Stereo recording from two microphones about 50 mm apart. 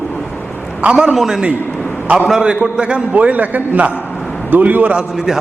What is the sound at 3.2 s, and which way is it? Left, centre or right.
A man's voice, right.